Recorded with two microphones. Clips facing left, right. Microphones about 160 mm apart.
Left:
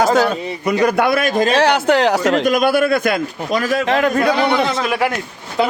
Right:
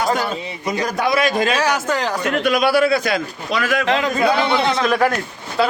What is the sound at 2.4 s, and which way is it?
A man's voice, 45° left (ahead or behind).